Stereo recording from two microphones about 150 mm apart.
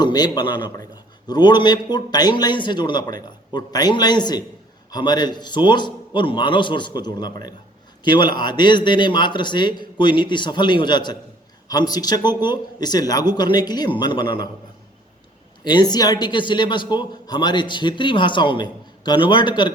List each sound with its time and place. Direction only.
0.0 s a man's voice: 30° left (ahead or behind)
15.6 s a man's voice: 30° left (ahead or behind)